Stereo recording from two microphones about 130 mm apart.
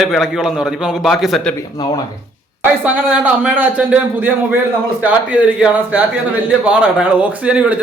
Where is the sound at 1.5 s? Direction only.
30° left (ahead or behind).